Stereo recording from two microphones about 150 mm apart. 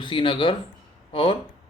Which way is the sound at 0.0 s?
35° left (ahead or behind).